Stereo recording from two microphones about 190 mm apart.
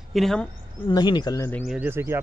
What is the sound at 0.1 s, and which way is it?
Speech, centre (ahead or behind).